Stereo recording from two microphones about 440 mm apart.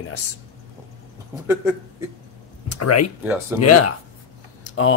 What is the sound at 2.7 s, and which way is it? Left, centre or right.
Speech, left.